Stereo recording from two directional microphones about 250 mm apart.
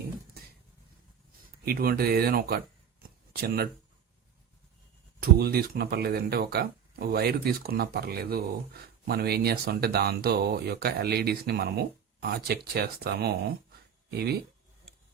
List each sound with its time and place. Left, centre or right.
1.6 s speech: right
5.2 s speech: right